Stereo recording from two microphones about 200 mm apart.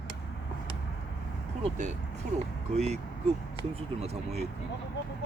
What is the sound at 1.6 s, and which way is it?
Speech, 35° right (ahead or behind).